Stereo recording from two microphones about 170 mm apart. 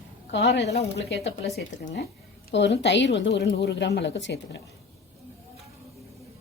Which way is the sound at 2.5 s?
90° left.